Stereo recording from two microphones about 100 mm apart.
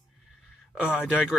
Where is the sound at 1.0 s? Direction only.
5° right (ahead or behind).